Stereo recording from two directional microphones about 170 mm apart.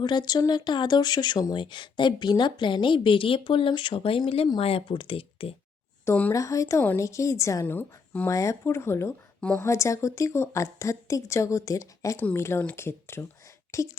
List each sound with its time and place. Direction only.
0.0 s speech: 25° left (ahead or behind)
6.1 s a woman's voice: 10° left (ahead or behind)